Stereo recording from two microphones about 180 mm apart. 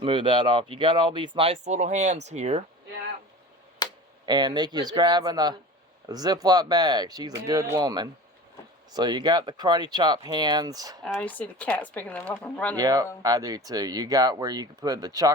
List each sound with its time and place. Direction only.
0.0 s speech: 25° right (ahead or behind)
3.8 s a sound: 25° left (ahead or behind)
4.3 s speech: 25° right (ahead or behind)
11.0 s speech: 5° left (ahead or behind)
12.7 s speech: 20° right (ahead or behind)